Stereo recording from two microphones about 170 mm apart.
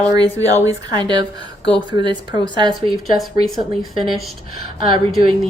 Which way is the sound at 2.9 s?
Centre (ahead or behind).